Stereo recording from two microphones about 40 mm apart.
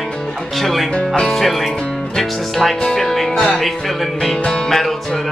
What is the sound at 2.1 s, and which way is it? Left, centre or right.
Music, centre.